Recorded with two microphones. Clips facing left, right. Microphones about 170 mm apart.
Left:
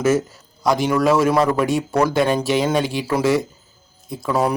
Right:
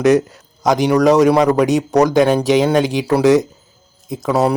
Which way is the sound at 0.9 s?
40° right (ahead or behind).